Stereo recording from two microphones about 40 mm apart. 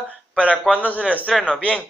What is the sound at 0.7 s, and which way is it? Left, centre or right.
Speech, left.